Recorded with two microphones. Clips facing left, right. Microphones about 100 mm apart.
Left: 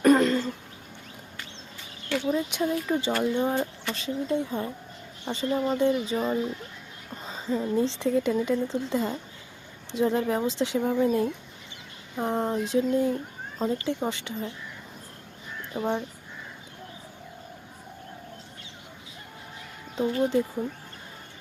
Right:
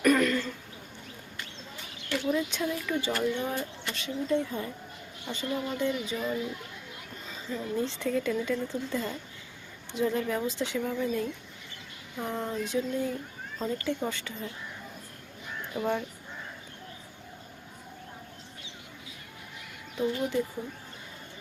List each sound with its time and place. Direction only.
0.0 s a sound: 30° left (ahead or behind)
2.2 s speech: 35° left (ahead or behind)
12.1 s speech: 35° left (ahead or behind)
15.7 s speech: 25° left (ahead or behind)
20.0 s speech: 30° left (ahead or behind)